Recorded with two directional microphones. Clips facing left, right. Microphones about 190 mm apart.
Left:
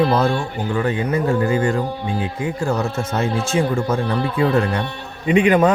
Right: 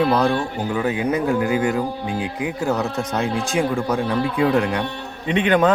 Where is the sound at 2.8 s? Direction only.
Centre (ahead or behind).